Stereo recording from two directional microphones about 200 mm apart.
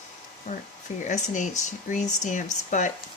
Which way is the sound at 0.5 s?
35° left (ahead or behind).